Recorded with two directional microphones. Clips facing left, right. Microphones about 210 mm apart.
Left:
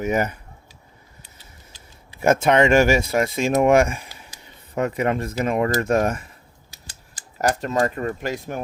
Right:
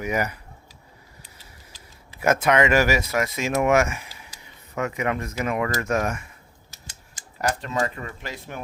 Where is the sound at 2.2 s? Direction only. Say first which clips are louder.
Left 3 dB; 30° left (ahead or behind).